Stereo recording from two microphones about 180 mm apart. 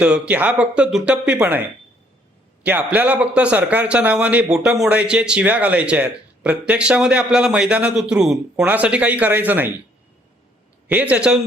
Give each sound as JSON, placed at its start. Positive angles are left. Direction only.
{"t": 0.0, "sound": "speech", "side_deg": -5}
{"t": 2.6, "sound": "speech", "side_deg": -10}
{"t": 10.8, "sound": "speech", "side_deg": -10}